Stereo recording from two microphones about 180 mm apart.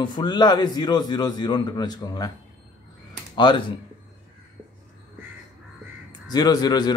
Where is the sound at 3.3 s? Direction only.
25° left (ahead or behind).